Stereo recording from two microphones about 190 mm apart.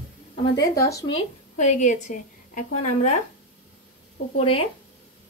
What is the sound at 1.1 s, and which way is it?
A woman's voice, 40° left (ahead or behind).